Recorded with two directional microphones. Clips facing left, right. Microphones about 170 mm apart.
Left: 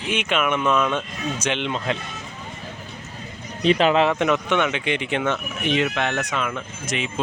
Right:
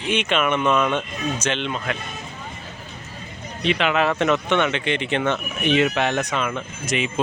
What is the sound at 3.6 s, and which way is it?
Speech, 40° left (ahead or behind).